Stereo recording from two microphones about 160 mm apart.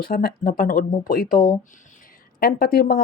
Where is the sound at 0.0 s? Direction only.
70° left (ahead or behind).